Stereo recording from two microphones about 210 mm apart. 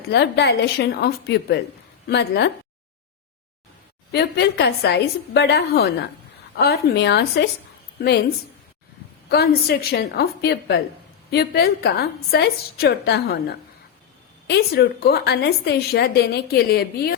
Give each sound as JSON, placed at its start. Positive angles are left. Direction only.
{"t": 0.1, "sound": "a woman's voice", "side_deg": 55}
{"t": 4.1, "sound": "a woman's voice", "side_deg": 55}
{"t": 9.3, "sound": "a woman's voice", "side_deg": 45}